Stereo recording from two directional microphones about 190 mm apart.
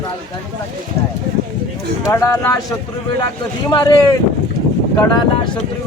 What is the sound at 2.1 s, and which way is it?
Speech, 15° left (ahead or behind).